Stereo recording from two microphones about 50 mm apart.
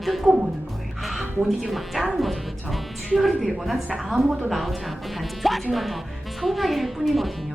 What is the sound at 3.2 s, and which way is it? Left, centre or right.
A woman's voice, centre.